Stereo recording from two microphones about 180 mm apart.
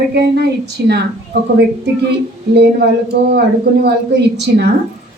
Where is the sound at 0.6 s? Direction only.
65° right (ahead or behind).